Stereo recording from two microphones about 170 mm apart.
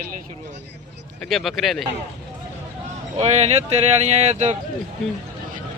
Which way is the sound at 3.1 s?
40° right (ahead or behind).